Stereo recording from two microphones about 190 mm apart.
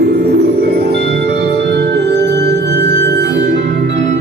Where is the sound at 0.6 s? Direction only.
55° right (ahead or behind).